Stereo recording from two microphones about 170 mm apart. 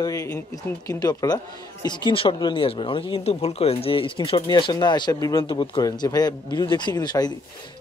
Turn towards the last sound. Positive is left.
turn(degrees=25)  # may be behind; listen again after turning